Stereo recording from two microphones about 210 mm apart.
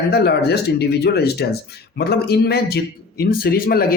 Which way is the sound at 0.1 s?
50° left (ahead or behind).